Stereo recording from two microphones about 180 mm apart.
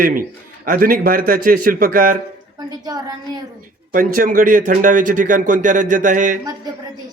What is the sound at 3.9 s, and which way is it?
A man's voice, 50° right (ahead or behind).